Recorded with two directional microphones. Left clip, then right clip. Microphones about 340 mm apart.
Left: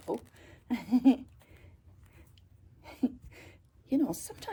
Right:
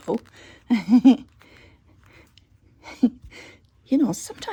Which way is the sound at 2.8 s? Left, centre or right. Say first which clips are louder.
Right 11 dB; right.